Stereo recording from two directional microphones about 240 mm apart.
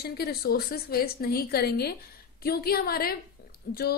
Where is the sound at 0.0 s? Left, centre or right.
Left.